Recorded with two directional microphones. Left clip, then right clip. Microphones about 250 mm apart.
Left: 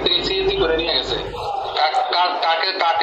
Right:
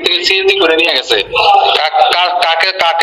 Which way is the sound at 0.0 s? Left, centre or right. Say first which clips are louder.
Right 8 dB; right.